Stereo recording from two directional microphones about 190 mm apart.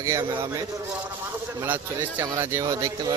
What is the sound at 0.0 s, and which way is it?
Speech, 15° right (ahead or behind).